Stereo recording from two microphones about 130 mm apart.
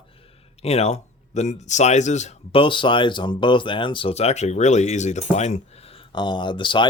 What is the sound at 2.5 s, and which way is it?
Speech, 40° left (ahead or behind).